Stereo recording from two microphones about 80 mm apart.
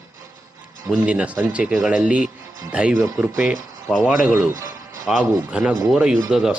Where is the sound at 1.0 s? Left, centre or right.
Centre.